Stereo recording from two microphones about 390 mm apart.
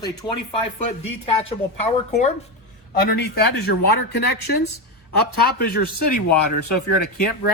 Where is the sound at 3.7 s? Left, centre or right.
Left.